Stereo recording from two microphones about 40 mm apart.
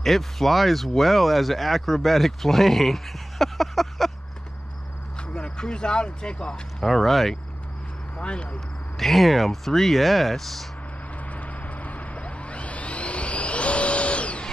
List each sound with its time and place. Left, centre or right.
0.0 s speech: centre
5.1 s speech: left
6.9 s speech: centre
8.2 s speech: left
8.9 s speech: centre
11.1 s a sound: left